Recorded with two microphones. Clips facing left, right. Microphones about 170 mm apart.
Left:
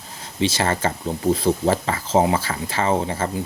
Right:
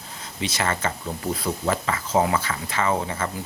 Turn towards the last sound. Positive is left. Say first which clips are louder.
# left 3 dB
turn(degrees=30)  # may be behind; listen again after turning